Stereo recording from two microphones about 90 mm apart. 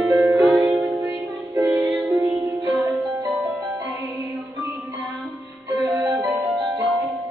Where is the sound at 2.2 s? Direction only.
40° right (ahead or behind).